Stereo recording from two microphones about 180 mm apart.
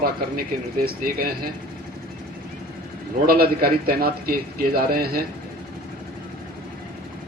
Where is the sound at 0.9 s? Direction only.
55° right (ahead or behind).